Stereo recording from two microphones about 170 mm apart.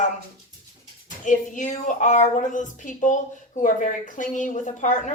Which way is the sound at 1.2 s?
45° left (ahead or behind).